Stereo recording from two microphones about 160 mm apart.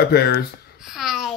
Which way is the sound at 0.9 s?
Centre (ahead or behind).